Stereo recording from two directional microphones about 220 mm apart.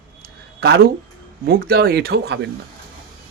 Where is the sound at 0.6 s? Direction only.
45° right (ahead or behind).